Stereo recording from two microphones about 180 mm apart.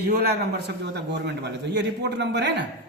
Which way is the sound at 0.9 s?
70° right (ahead or behind).